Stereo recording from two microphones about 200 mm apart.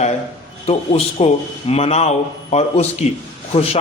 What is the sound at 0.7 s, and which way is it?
Speech, 30° left (ahead or behind).